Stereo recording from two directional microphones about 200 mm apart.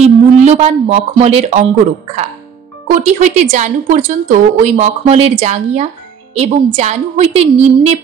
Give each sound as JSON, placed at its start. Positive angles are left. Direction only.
{"t": 0.0, "sound": "a woman's voice", "side_deg": -30}
{"t": 2.9, "sound": "a woman's voice", "side_deg": -40}